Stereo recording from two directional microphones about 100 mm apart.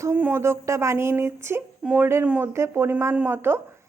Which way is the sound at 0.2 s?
25° right (ahead or behind).